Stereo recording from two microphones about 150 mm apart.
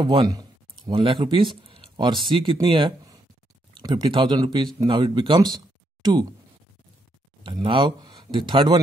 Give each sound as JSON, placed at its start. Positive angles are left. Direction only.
{"t": 0.0, "sound": "speech", "side_deg": -30}
{"t": 7.4, "sound": "speech", "side_deg": -35}